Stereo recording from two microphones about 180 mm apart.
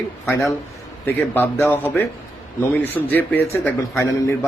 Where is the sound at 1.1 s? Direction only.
10° left (ahead or behind).